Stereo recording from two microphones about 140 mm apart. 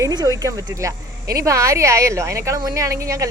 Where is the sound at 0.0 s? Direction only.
25° right (ahead or behind).